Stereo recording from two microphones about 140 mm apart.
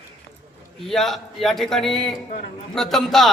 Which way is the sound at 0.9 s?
Centre (ahead or behind).